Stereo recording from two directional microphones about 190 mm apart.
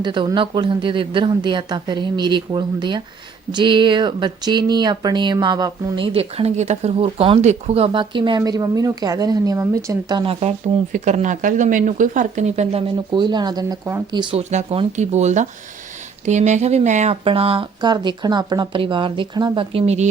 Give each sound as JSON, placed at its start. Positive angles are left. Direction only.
{"t": 0.0, "sound": "speech", "side_deg": -25}
{"t": 6.1, "sound": "speech", "side_deg": -35}
{"t": 10.9, "sound": "speech", "side_deg": -40}
{"t": 13.1, "sound": "speech", "side_deg": -25}
{"t": 14.5, "sound": "speech", "side_deg": -35}